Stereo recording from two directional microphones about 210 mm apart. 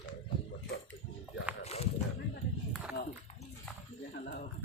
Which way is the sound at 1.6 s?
30° left (ahead or behind).